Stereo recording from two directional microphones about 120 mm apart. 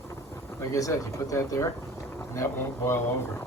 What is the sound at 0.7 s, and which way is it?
Speech, 30° left (ahead or behind).